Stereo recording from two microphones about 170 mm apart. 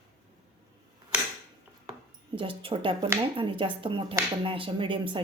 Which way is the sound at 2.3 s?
30° right (ahead or behind).